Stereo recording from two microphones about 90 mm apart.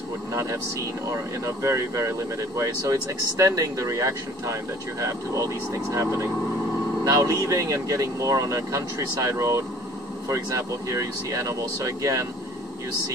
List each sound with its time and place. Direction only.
0.3 s speech: 35° right (ahead or behind)